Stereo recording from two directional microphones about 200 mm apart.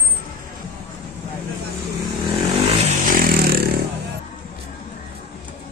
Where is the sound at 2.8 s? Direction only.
45° right (ahead or behind).